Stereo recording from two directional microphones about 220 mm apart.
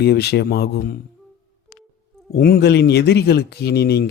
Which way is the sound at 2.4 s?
45° left (ahead or behind).